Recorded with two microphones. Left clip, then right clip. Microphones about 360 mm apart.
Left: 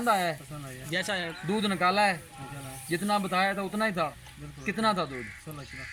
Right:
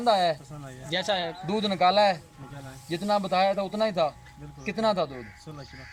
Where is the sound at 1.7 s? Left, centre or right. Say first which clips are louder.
Right 4 dB; centre.